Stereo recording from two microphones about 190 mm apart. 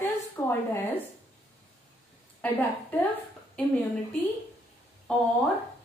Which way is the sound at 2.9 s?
10° left (ahead or behind).